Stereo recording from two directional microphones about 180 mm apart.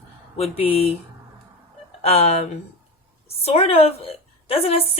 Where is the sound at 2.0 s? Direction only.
35° left (ahead or behind).